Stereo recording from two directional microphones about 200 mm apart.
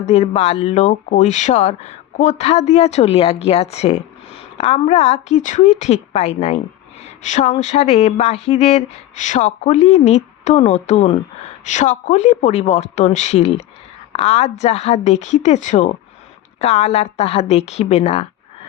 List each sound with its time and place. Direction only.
0.0 s speech: 35° left (ahead or behind)